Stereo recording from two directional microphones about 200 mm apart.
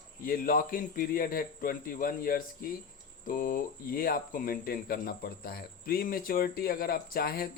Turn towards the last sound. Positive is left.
turn(degrees=50)  # may be behind; listen again after turning